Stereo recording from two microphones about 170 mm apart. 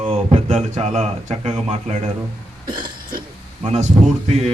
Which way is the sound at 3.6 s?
40° right (ahead or behind).